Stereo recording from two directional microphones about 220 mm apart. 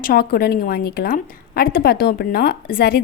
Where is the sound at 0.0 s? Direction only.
40° left (ahead or behind).